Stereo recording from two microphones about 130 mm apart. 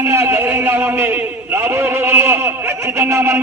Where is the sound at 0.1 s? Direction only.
20° right (ahead or behind).